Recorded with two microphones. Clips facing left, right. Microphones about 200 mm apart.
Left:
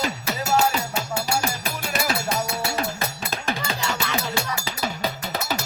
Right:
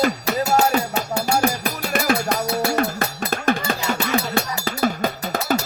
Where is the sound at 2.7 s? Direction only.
55° right (ahead or behind).